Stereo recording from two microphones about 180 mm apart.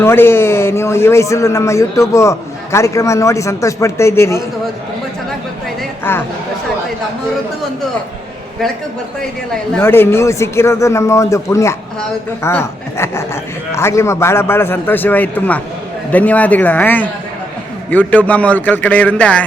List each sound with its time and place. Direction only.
0.0 s a man's voice: 15° left (ahead or behind)
6.1 s a man's voice: 10° left (ahead or behind)
9.7 s a man's voice: 15° left (ahead or behind)